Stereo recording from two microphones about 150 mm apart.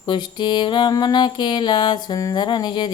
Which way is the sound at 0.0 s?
30° left (ahead or behind).